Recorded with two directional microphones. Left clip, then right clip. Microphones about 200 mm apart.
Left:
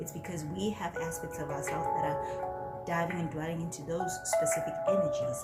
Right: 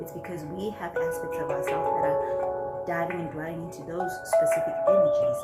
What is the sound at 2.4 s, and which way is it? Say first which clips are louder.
Music: right 8 dB; 25° right (ahead or behind).